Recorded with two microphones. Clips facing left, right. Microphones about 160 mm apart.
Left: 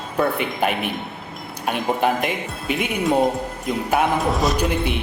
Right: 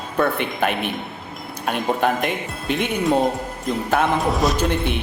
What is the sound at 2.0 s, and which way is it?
Speech, 10° left (ahead or behind).